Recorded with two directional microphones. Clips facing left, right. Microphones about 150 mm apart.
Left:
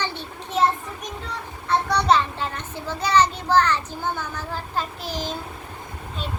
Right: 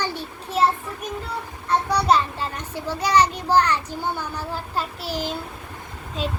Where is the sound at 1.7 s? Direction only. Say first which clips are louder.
Even; 10° right (ahead or behind).